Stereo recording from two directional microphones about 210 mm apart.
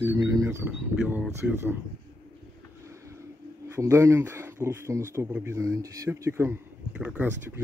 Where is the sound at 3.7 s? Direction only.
15° right (ahead or behind).